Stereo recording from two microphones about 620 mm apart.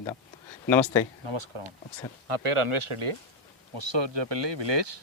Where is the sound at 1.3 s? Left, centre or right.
Right.